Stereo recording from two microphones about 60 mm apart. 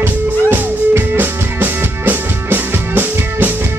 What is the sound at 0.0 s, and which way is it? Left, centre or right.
Music, right.